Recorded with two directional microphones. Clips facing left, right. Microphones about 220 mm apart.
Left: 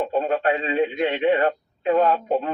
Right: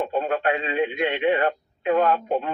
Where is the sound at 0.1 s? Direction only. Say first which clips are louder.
Left 2 dB; 40° left (ahead or behind).